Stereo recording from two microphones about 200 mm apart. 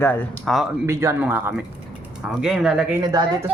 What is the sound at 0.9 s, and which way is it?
Speech, 15° right (ahead or behind).